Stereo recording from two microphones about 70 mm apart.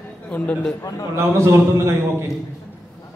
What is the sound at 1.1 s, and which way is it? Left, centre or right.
A man's voice, right.